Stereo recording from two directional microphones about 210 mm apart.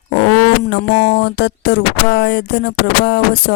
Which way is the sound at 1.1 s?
50° left (ahead or behind).